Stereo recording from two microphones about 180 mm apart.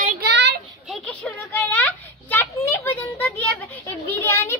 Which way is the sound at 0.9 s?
5° left (ahead or behind).